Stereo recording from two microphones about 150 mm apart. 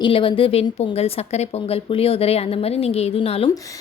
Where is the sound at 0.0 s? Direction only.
35° left (ahead or behind).